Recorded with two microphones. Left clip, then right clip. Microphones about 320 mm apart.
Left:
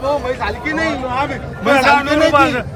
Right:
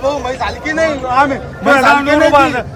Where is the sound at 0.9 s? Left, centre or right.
Right.